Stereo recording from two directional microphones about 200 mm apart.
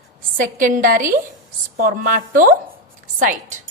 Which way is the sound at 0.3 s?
40° right (ahead or behind).